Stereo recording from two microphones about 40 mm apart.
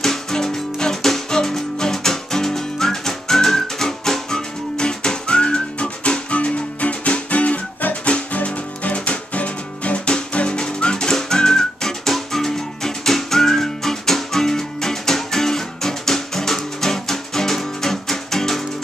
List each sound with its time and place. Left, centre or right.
0.0 s music: centre